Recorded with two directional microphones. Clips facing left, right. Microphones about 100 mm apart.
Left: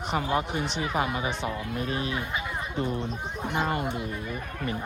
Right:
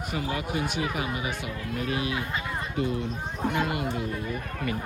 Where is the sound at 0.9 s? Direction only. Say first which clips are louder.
Left 3 dB; 35° left (ahead or behind).